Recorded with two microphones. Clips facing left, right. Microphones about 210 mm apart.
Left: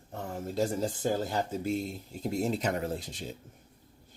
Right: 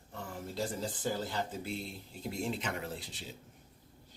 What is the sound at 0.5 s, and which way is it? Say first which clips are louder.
Speech: left 7 dB; 45° left (ahead or behind).